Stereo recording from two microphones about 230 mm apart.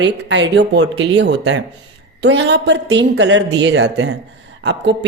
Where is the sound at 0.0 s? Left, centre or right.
Right.